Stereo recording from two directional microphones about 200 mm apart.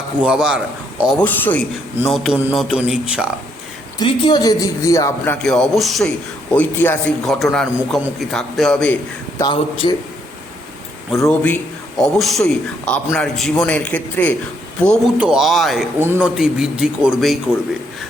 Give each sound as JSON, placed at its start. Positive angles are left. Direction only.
{"t": 0.2, "sound": "a man's voice", "side_deg": -5}
{"t": 1.2, "sound": "a man's voice", "side_deg": 10}
{"t": 2.0, "sound": "a man's voice", "side_deg": 0}
{"t": 4.0, "sound": "a man's voice", "side_deg": 25}
{"t": 9.4, "sound": "a man's voice", "side_deg": 25}
{"t": 11.2, "sound": "a man's voice", "side_deg": 10}